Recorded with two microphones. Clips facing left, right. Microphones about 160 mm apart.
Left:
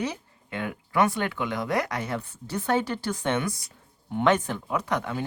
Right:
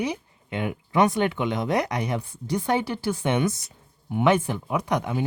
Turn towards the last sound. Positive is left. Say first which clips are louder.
# right 3 dB
turn(degrees=-15)  # may be behind; listen again after turning